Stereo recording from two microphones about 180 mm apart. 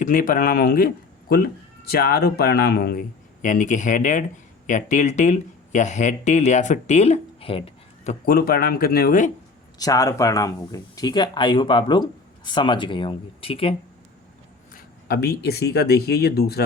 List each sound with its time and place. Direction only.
0.0 s speech: 50° left (ahead or behind)
3.4 s speech: 45° left (ahead or behind)
8.2 s speech: 55° left (ahead or behind)
9.7 s speech: 20° left (ahead or behind)
14.7 s speech: 60° left (ahead or behind)